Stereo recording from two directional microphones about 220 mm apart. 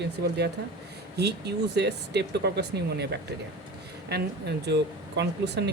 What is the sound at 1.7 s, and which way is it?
Speech, 50° right (ahead or behind).